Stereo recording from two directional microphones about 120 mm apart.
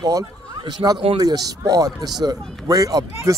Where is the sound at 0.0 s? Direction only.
30° right (ahead or behind).